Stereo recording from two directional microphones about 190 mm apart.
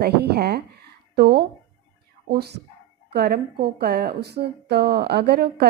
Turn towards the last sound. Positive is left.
turn(degrees=-60)  # may be behind; listen again after turning